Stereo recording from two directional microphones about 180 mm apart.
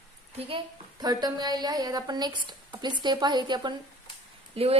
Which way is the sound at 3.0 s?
25° right (ahead or behind).